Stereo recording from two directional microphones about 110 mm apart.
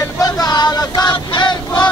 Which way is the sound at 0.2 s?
35° left (ahead or behind).